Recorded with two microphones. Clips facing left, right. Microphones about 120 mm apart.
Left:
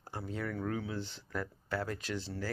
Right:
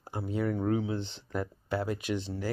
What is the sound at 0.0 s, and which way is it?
Speech, 15° right (ahead or behind).